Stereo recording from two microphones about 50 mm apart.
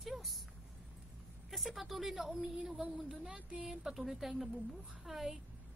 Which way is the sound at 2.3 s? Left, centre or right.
Centre.